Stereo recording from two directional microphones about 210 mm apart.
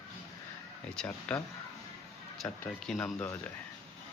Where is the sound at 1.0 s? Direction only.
10° left (ahead or behind).